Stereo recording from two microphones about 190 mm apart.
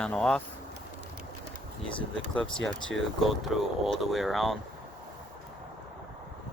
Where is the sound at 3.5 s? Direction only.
Centre (ahead or behind).